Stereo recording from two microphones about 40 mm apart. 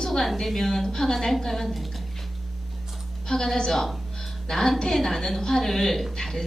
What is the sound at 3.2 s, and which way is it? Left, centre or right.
A woman's voice, centre.